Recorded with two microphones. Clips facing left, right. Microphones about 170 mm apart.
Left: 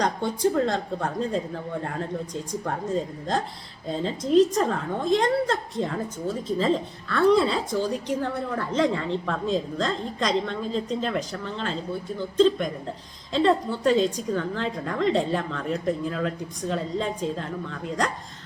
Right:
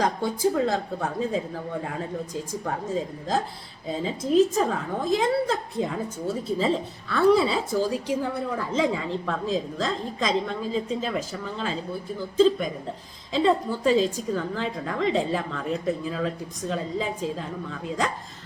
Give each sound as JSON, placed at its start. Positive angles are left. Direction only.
{"t": 0.0, "sound": "a woman's voice", "side_deg": -5}